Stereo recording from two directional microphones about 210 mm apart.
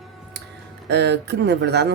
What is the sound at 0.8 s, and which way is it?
Speech, 55° right (ahead or behind).